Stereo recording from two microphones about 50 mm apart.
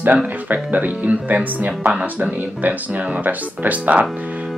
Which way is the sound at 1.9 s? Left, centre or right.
Right.